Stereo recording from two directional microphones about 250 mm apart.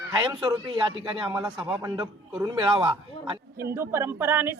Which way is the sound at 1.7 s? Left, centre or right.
Centre.